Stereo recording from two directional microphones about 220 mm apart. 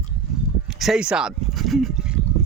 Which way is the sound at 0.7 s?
Centre (ahead or behind).